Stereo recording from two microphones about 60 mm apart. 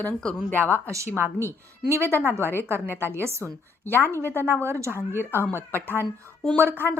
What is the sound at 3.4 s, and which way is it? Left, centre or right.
Speech, left.